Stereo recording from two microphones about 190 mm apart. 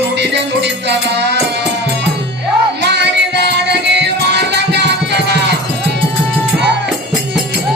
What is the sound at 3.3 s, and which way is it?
Music, 65° right (ahead or behind).